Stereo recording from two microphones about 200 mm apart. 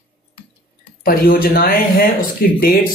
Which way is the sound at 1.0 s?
45° left (ahead or behind).